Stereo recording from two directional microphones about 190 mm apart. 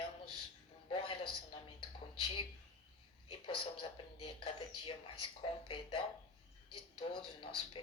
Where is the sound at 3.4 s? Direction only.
30° left (ahead or behind).